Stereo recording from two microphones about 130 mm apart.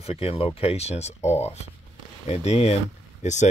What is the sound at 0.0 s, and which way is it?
Speech, 50° left (ahead or behind).